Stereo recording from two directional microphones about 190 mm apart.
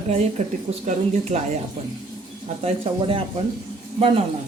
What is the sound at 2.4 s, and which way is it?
A woman's voice, 30° right (ahead or behind).